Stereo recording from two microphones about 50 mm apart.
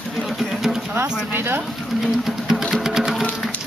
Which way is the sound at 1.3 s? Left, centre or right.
Right.